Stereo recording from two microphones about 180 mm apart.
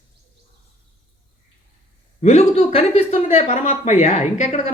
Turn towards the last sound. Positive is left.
turn(degrees=40)  # may be behind; listen again after turning